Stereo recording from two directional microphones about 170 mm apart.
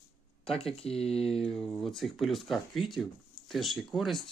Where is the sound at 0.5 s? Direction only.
35° left (ahead or behind).